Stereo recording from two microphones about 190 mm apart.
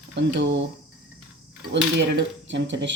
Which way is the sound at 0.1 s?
70° right (ahead or behind).